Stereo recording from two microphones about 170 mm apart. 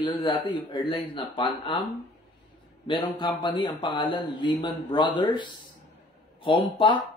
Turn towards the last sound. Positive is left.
turn(degrees=30)  # may be behind; listen again after turning